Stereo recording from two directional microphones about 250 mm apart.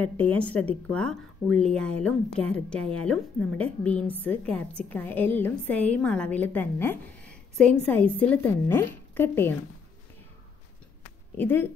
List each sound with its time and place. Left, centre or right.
0.0 s a woman's voice: centre
11.3 s a woman's voice: centre